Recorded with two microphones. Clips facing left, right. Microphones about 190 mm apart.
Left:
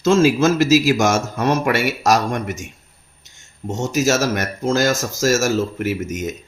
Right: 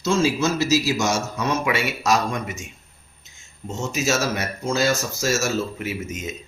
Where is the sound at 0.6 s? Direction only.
90° left.